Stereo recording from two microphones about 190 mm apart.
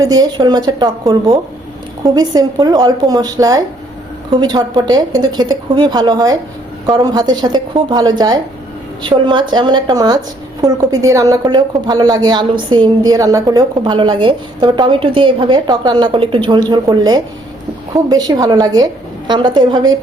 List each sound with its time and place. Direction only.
0.0 s a woman's voice: 20° right (ahead or behind)